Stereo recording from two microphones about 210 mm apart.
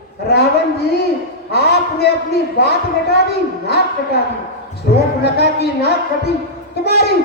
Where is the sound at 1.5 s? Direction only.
50° left (ahead or behind).